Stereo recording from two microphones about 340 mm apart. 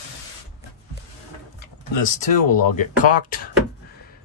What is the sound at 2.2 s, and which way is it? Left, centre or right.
Speech, left.